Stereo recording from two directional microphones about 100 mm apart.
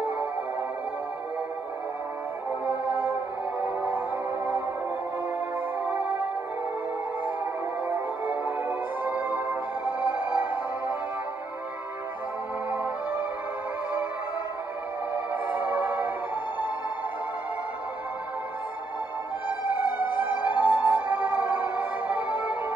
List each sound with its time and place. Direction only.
2.6 s music: 15° right (ahead or behind)
5.9 s music: 15° right (ahead or behind)
7.9 s music: 15° right (ahead or behind)
12.7 s music: 15° right (ahead or behind)
15.3 s music: 15° right (ahead or behind)
19.6 s music: 15° right (ahead or behind)